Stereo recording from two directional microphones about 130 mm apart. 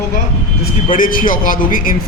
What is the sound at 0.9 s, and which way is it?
Speech, 90° left.